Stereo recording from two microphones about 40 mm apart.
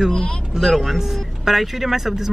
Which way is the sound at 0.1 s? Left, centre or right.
Left.